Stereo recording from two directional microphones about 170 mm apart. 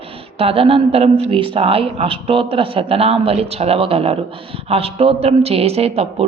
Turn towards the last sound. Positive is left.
turn(degrees=-35)  # may be behind; listen again after turning